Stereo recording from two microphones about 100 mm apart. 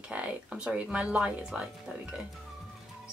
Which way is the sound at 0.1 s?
10° right (ahead or behind).